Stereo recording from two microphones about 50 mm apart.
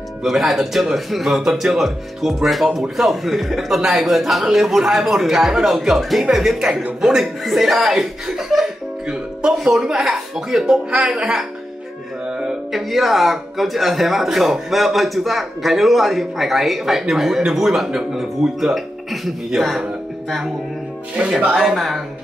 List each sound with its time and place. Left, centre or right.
0.2 s speech: centre
12.3 s music: centre
12.7 s speech: centre
21.2 s speech: centre
21.6 s speech: centre